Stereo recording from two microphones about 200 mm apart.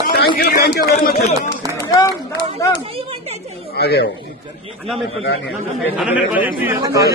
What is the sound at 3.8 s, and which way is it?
Speech, 55° left (ahead or behind).